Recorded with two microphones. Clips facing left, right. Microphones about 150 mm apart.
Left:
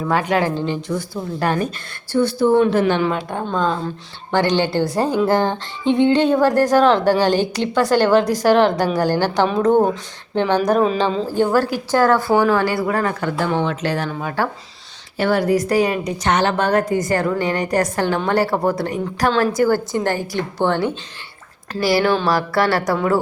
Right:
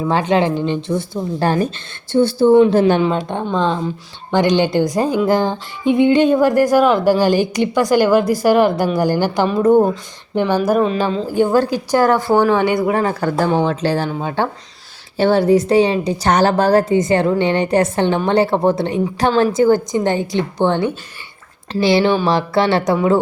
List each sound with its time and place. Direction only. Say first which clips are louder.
0.1 s a woman's voice: right 2 dB; 25° right (ahead or behind); by 11.3 s 5° right (ahead or behind)
11.3 s speech: right 5 dB; 15° right (ahead or behind)
12.3 s a woman's voice: right 2 dB; 5° left (ahead or behind)
12.5 s a woman's voice: right 3 dB; 20° right (ahead or behind)
13.1 s a woman's voice: right 4 dB; 40° right (ahead or behind); by 23.0 s 20° right (ahead or behind)